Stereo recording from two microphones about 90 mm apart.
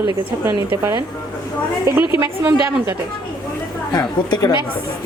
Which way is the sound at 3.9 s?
50° left (ahead or behind).